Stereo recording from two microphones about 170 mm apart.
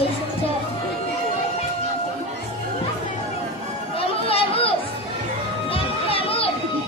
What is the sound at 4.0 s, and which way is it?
Chatter, 35° left (ahead or behind).